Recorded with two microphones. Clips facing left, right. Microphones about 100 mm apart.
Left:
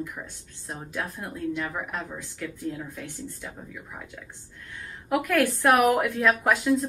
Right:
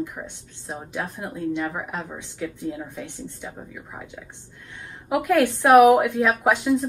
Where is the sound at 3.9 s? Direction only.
10° right (ahead or behind).